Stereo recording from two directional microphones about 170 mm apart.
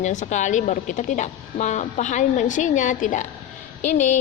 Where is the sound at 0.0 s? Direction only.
45° left (ahead or behind).